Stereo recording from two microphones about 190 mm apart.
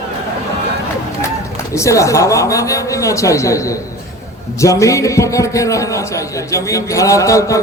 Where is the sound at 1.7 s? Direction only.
15° left (ahead or behind).